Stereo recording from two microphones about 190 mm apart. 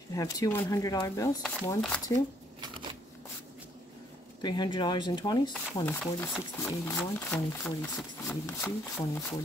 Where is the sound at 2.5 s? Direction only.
25° right (ahead or behind).